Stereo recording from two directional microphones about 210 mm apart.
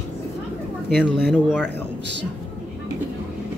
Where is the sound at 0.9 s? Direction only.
5° left (ahead or behind).